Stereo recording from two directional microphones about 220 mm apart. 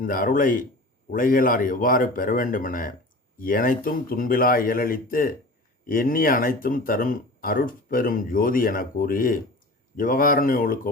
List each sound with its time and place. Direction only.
0.0 s speech: 40° left (ahead or behind)